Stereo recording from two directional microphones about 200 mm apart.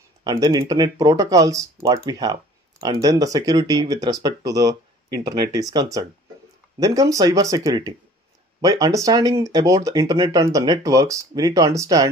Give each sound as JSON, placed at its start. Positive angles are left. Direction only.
{"t": 0.2, "sound": "speech", "side_deg": -20}